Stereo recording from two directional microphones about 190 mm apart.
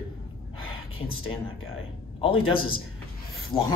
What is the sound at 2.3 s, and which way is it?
Speech, 90° left.